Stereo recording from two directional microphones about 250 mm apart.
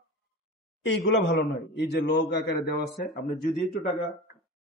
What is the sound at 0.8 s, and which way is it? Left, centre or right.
A man's voice, left.